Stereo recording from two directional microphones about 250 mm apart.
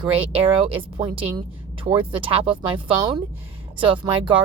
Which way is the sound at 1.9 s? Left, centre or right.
Centre.